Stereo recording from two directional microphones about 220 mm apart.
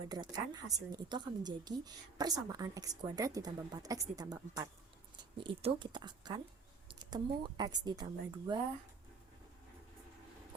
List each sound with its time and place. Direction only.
0.1 s a woman's voice: 20° right (ahead or behind)